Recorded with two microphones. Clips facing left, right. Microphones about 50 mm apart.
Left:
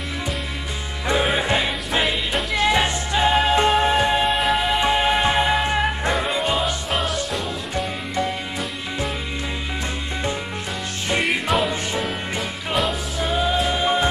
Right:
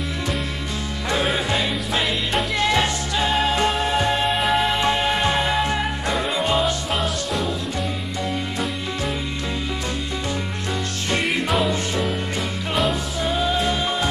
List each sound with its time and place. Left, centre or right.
1.0 s music: centre
2.3 s music: centre
2.7 s music: centre
4.3 s music: centre
4.7 s music: centre
6.1 s music: centre
11.2 s music: centre
12.7 s music: centre
13.4 s music: centre